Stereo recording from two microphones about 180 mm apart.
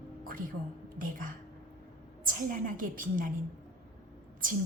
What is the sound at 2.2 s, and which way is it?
A woman's voice, 50° right (ahead or behind).